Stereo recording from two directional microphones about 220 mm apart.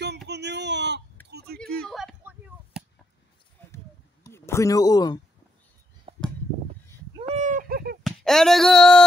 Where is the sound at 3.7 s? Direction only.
10° left (ahead or behind).